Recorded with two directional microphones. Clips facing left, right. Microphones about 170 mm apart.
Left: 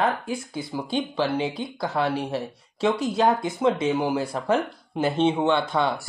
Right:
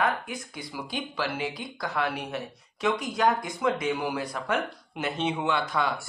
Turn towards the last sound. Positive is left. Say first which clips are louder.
# left 5 dB
turn(degrees=25)  # may be behind; listen again after turning